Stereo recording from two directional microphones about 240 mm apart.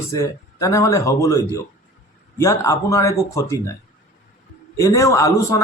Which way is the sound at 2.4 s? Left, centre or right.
Centre.